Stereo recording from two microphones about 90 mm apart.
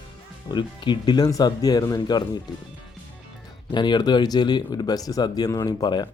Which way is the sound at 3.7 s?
55° left (ahead or behind).